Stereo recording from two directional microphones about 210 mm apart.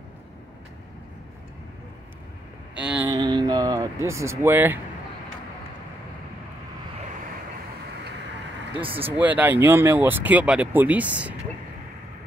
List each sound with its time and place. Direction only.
2.7 s a sound: 5° right (ahead or behind)
3.1 s vehicle: 20° right (ahead or behind)
8.8 s speech: 25° right (ahead or behind)
9.2 s speech: 10° right (ahead or behind)